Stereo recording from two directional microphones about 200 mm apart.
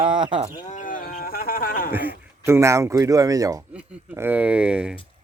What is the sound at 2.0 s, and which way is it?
Speech, 10° right (ahead or behind).